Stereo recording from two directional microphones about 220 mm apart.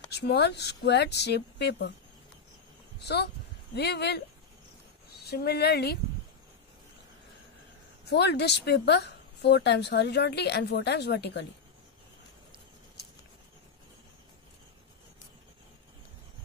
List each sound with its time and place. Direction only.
0.1 s a woman's voice: 50° left (ahead or behind)
3.7 s a woman's voice: 50° left (ahead or behind)
8.0 s a woman's voice: 50° left (ahead or behind)